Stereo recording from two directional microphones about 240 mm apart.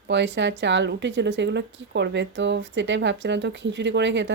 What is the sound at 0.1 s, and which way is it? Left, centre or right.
A woman's voice, right.